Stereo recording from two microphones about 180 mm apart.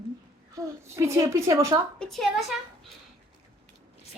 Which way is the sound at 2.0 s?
Centre (ahead or behind).